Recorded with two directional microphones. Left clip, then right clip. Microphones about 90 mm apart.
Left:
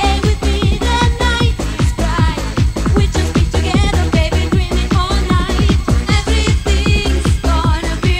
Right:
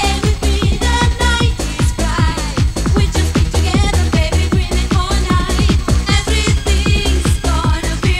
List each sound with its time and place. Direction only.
0.0 s music: 40° right (ahead or behind)